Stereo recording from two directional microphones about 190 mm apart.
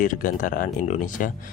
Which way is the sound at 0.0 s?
45° left (ahead or behind).